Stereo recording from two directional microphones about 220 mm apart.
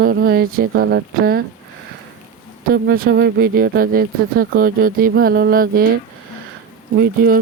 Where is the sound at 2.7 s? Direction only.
45° right (ahead or behind).